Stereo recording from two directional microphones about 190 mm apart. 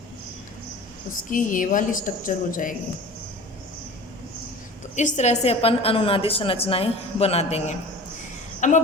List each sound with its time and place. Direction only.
1.3 s a woman's voice: 45° left (ahead or behind)
4.9 s a woman's voice: 40° left (ahead or behind)